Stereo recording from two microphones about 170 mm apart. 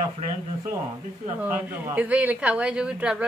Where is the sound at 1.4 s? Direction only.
10° right (ahead or behind).